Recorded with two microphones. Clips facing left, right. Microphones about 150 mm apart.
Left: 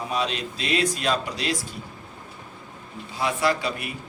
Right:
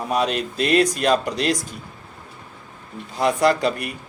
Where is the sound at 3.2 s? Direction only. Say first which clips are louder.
Right 6 dB; 45° right (ahead or behind).